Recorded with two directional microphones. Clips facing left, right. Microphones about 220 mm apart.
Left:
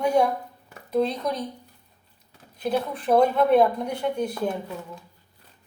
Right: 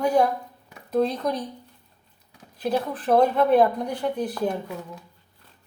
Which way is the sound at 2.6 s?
Centre (ahead or behind).